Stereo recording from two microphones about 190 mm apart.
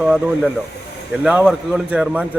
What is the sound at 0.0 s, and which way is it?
A man's voice, 5° right (ahead or behind).